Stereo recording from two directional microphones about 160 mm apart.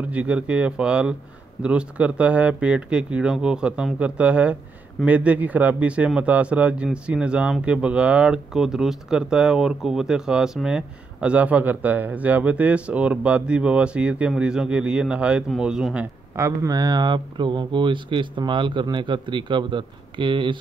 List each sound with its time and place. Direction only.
0.1 s speech: 10° right (ahead or behind)
16.3 s speech: 20° right (ahead or behind)